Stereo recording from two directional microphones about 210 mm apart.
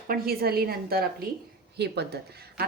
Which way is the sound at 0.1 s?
45° right (ahead or behind).